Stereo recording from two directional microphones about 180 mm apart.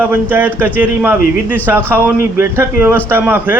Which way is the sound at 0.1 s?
10° right (ahead or behind).